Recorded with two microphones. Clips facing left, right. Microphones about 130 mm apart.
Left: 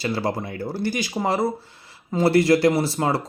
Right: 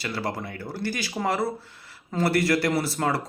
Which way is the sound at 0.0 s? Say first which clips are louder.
Left 5 dB; 30° left (ahead or behind).